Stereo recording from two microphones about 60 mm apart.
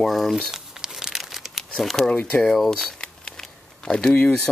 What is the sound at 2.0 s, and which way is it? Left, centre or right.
Speech, left.